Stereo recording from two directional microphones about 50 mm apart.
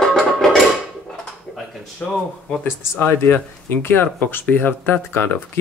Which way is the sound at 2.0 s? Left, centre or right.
Left.